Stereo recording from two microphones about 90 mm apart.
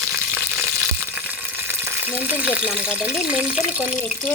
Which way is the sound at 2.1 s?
20° right (ahead or behind).